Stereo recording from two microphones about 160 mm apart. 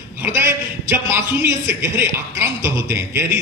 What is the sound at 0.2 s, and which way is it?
A man's voice, 15° right (ahead or behind).